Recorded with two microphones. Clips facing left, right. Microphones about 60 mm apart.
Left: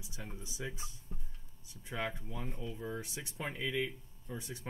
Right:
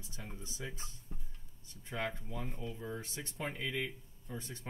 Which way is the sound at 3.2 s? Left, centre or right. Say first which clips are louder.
Even; centre.